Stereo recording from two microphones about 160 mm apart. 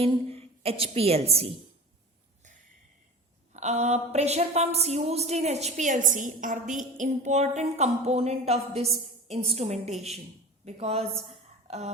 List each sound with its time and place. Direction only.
0.0 s a woman's voice: 40° right (ahead or behind)
3.5 s a woman's voice: 45° right (ahead or behind)